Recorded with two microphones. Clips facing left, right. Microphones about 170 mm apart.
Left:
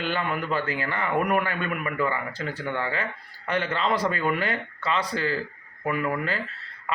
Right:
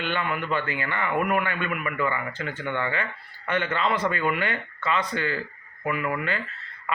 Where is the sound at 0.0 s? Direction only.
35° left (ahead or behind).